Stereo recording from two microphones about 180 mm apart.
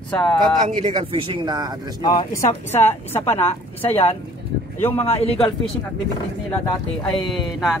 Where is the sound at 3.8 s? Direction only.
35° left (ahead or behind).